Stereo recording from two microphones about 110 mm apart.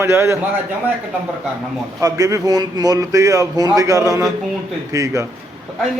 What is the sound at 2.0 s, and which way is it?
A man's voice, 30° right (ahead or behind).